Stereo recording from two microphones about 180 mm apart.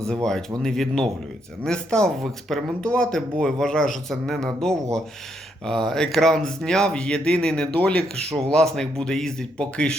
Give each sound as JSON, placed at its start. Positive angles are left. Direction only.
{"t": 0.1, "sound": "speech", "side_deg": 5}